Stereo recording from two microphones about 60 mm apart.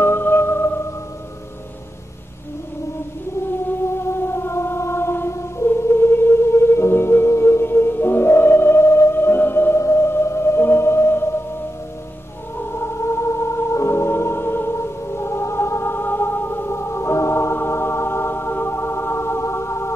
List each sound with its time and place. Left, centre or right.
0.0 s music: left
3.9 s music: left
9.8 s music: left
12.7 s music: left